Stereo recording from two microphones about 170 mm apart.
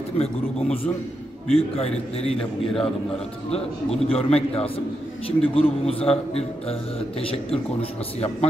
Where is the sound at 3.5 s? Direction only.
35° left (ahead or behind).